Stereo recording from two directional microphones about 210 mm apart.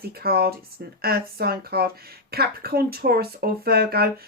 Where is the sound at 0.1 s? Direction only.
45° right (ahead or behind).